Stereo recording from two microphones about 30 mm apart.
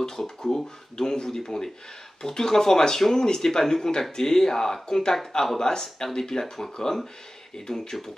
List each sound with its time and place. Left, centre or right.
0.4 s speech: centre